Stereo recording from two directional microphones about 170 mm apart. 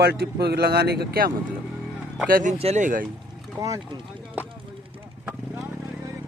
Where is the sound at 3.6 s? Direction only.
20° right (ahead or behind).